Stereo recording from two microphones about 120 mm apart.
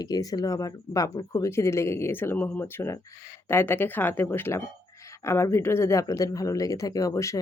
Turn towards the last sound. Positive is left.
turn(degrees=25)  # may be behind; listen again after turning